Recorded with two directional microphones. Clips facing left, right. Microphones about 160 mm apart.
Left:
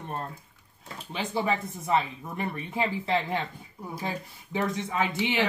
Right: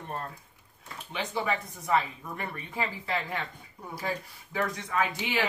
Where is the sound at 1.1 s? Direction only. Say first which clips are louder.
Left 3 dB; 30° left (ahead or behind).